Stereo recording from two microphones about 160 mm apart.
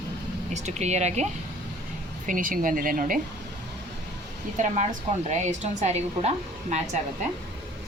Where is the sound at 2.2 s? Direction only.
55° right (ahead or behind).